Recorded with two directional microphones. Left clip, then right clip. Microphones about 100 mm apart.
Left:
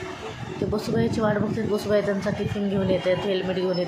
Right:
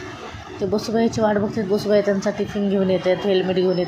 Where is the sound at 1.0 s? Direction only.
25° right (ahead or behind).